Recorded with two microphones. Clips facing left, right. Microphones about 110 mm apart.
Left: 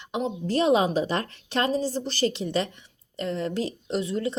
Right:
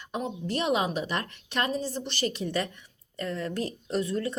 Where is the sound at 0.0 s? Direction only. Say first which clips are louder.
Left 4 dB; 20° left (ahead or behind).